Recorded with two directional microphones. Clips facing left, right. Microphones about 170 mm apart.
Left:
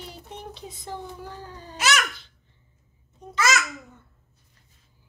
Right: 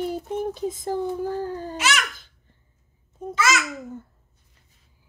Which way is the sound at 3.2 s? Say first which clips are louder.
Right 10 dB; 50° right (ahead or behind).